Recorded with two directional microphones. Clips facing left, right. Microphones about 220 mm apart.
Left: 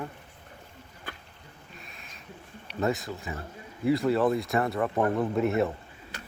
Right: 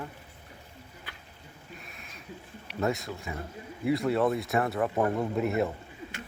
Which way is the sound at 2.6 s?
Centre (ahead or behind).